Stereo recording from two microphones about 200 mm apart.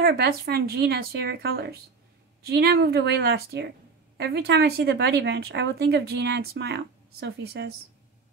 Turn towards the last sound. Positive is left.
turn(degrees=-55)  # may be behind; listen again after turning